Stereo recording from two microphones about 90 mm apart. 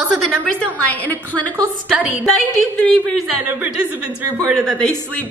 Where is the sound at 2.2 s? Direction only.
10° left (ahead or behind).